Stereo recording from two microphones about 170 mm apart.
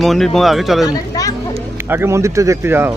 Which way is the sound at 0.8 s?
20° left (ahead or behind).